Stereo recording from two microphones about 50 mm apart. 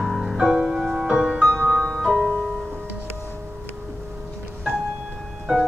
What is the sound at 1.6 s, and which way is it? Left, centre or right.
Music, centre.